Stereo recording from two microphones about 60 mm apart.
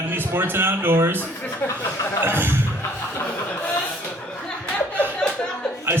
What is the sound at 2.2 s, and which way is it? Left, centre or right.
Speech, right.